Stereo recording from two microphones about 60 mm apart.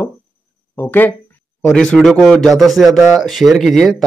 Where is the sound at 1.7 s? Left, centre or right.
Centre.